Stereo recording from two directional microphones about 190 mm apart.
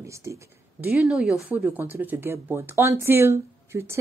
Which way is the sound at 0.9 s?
5° right (ahead or behind).